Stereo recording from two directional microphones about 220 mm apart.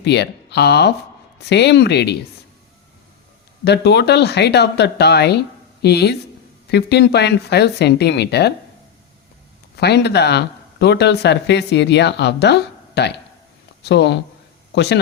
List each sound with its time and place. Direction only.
0.0 s speech: 50° left (ahead or behind)
3.6 s speech: 50° left (ahead or behind)
9.7 s speech: 50° left (ahead or behind)